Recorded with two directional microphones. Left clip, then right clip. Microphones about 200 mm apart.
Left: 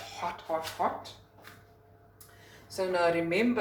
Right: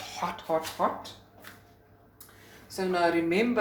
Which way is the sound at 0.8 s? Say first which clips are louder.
Right 1 dB; 45° right (ahead or behind).